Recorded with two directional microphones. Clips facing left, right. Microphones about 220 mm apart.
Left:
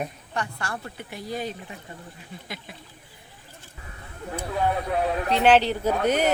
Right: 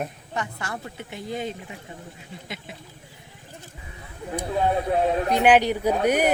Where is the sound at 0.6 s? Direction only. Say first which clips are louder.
Even; 20° right (ahead or behind).